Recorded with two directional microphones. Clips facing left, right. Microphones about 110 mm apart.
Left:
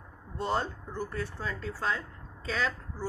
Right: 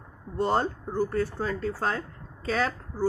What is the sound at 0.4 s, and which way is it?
Speech, 45° right (ahead or behind).